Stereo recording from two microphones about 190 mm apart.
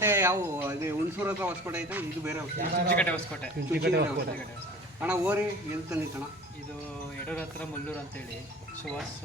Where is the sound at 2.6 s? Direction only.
50° right (ahead or behind).